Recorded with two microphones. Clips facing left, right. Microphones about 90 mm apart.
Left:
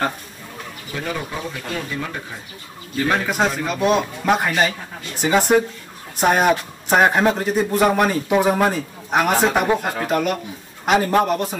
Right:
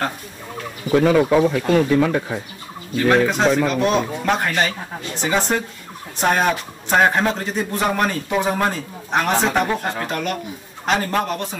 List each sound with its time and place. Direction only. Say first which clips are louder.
0.9 s speech: right 13 dB; 80° right
3.1 s a man's voice: right 5 dB; 5° left (ahead or behind)